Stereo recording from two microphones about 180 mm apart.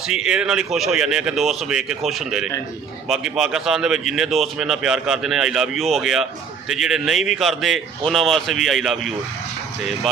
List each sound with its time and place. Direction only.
0.1 s speech: 5° right (ahead or behind)